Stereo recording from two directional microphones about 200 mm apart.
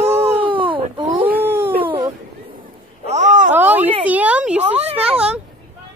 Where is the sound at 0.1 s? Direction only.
25° right (ahead or behind).